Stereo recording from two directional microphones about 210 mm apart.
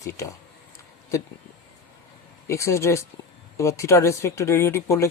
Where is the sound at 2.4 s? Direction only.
15° left (ahead or behind).